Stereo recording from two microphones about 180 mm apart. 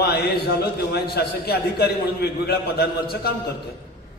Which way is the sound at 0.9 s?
60° left (ahead or behind).